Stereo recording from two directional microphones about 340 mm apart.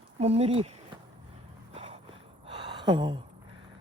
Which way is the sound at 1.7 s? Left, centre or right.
Centre.